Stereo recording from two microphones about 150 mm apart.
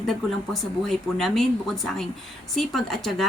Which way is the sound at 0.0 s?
Centre (ahead or behind).